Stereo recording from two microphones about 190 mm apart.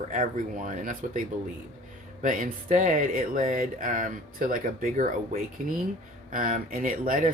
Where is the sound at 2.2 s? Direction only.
45° right (ahead or behind).